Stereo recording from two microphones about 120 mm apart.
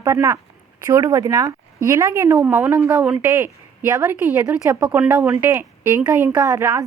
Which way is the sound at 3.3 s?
20° right (ahead or behind).